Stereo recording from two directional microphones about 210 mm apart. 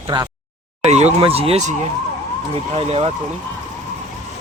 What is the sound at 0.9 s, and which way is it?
Speech, 30° right (ahead or behind).